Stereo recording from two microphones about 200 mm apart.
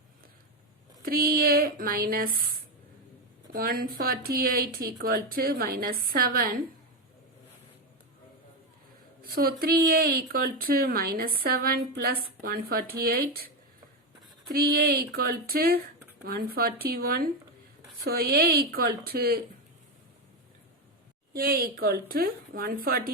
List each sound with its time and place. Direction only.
1.0 s speech: 50° right (ahead or behind)
9.2 s speech: 50° right (ahead or behind)
14.5 s speech: 50° right (ahead or behind)
21.3 s speech: 50° right (ahead or behind)